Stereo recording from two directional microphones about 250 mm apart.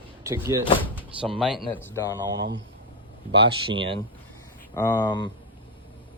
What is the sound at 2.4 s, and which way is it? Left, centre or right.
Speech, right.